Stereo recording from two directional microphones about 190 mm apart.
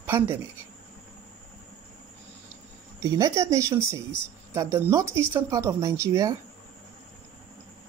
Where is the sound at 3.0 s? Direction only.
20° right (ahead or behind).